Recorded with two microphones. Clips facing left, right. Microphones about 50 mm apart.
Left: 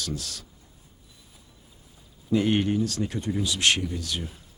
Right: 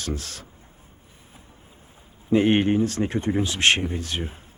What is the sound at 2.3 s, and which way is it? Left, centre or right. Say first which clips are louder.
Speech: right 4 dB; right.